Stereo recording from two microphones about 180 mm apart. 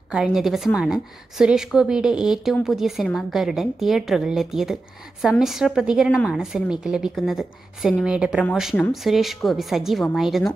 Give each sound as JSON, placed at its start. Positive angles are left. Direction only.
{"t": 0.1, "sound": "a woman's voice", "side_deg": -5}